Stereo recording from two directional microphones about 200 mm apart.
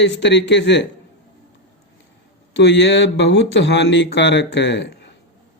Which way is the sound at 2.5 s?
60° left (ahead or behind).